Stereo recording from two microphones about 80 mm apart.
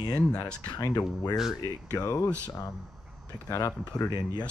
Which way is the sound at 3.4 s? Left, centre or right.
Left.